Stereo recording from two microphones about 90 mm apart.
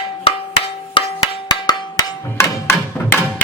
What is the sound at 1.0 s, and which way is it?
Percussion, 70° left (ahead or behind).